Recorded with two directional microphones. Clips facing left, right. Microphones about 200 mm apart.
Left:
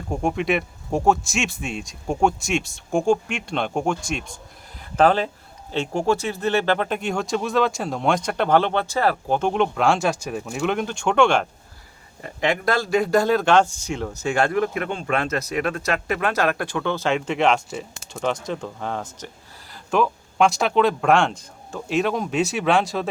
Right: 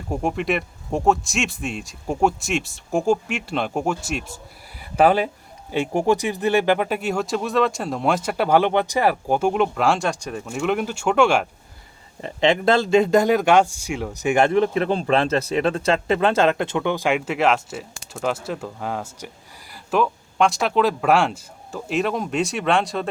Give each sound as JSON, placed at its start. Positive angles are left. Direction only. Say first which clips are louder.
{"t": 0.1, "sound": "speech", "louder": "left 1 dB", "side_deg": -5}
{"t": 12.2, "sound": "speech", "louder": "right 4 dB", "side_deg": -25}